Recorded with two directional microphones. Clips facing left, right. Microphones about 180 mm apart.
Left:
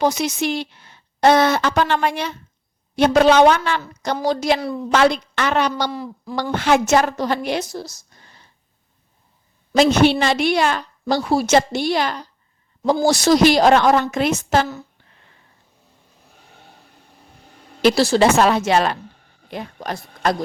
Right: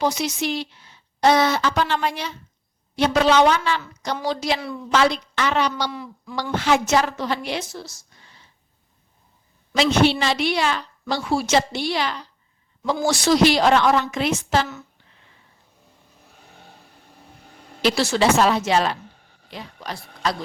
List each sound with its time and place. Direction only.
0.0 s a woman's voice: 50° left (ahead or behind)
4.6 s speech: 40° left (ahead or behind)
4.9 s a woman's voice: 55° left (ahead or behind)
5.9 s speech: 35° left (ahead or behind)
6.5 s a woman's voice: 55° left (ahead or behind)
9.7 s a woman's voice: 50° left (ahead or behind)
11.0 s a woman's voice: 40° left (ahead or behind)
17.8 s speech: 35° left (ahead or behind)
18.2 s speech: 55° left (ahead or behind)